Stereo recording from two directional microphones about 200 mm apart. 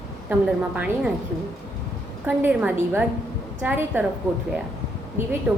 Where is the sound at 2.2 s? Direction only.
10° right (ahead or behind).